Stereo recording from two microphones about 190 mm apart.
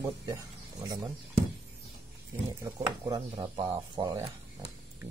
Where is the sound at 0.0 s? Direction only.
15° right (ahead or behind).